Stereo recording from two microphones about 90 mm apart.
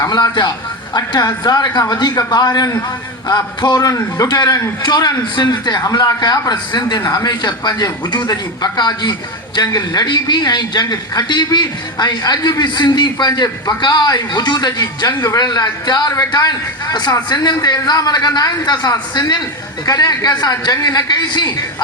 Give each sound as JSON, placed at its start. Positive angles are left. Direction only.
{"t": 0.0, "sound": "a man's voice", "side_deg": 55}
{"t": 3.8, "sound": "a man's voice", "side_deg": 40}